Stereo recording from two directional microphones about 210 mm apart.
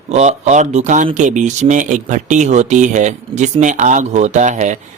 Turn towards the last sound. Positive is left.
turn(degrees=-35)  # may be behind; listen again after turning